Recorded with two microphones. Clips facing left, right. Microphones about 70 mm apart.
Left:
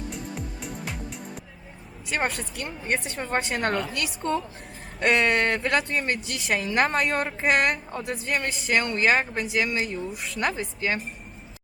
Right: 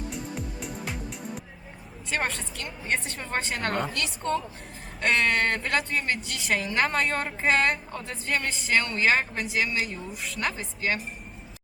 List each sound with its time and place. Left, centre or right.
0.1 s music: centre
2.0 s a woman's voice: centre
3.3 s a woman's voice: left